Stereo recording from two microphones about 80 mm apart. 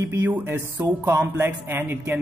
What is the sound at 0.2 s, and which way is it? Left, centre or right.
Speech, right.